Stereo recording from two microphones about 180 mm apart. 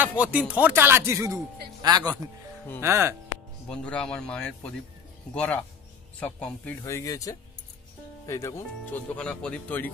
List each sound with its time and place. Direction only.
0.0 s speech: 10° right (ahead or behind)
3.6 s speech: 5° left (ahead or behind)